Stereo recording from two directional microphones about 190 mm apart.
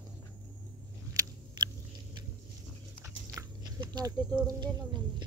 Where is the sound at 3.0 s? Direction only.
15° right (ahead or behind).